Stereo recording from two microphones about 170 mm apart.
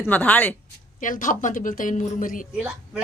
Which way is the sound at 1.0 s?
50° left (ahead or behind).